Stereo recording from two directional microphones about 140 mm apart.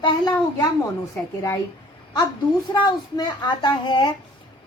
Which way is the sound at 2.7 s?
30° left (ahead or behind).